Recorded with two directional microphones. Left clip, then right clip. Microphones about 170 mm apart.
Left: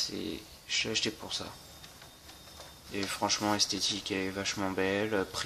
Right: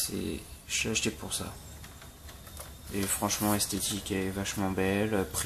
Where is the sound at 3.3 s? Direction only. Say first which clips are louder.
Left 3 dB; 10° left (ahead or behind).